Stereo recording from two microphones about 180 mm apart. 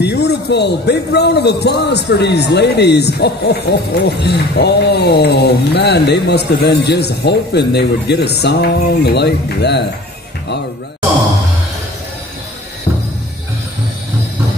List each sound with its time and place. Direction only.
0.0 s a man's voice: 65° left (ahead or behind)